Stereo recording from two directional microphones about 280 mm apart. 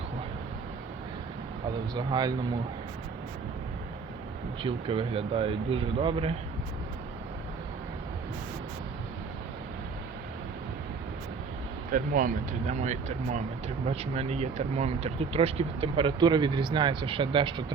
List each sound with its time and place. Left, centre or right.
2.0 s speech: centre
4.6 s speech: centre
11.9 s speech: right